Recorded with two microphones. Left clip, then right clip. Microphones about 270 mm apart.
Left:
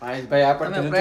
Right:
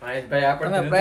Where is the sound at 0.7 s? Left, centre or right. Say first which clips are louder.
Right 3 dB; centre.